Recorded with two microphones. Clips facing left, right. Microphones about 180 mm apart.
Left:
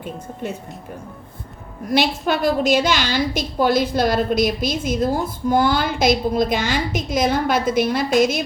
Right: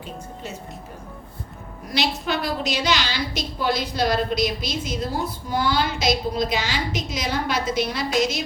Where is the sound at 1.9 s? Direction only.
50° left (ahead or behind).